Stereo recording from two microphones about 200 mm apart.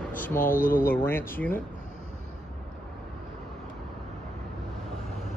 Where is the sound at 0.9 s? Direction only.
10° left (ahead or behind).